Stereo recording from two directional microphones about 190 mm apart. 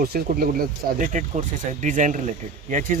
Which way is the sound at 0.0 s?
50° right (ahead or behind).